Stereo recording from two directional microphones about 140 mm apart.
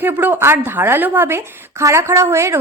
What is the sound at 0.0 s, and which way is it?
A woman's voice, 15° right (ahead or behind).